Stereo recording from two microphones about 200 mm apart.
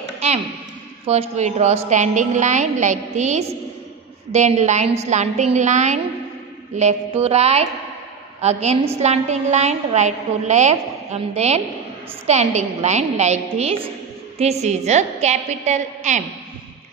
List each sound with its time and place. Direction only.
1.0 s a woman's voice: 30° right (ahead or behind)